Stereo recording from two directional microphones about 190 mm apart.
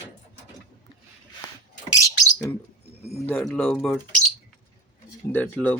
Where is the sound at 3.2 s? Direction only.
5° left (ahead or behind).